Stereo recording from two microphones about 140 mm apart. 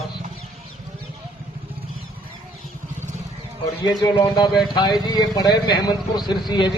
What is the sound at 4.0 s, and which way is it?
Speech, 30° left (ahead or behind).